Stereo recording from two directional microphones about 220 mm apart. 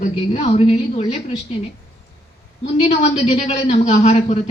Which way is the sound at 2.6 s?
30° left (ahead or behind).